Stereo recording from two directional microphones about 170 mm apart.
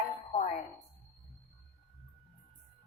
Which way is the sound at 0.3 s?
45° left (ahead or behind).